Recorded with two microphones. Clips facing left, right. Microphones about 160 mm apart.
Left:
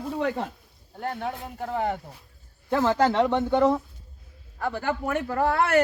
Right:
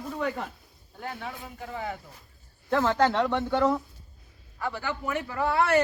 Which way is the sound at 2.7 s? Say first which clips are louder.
Left 2 dB; 5° left (ahead or behind).